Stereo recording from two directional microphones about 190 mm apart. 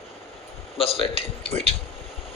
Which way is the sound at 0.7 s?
30° left (ahead or behind).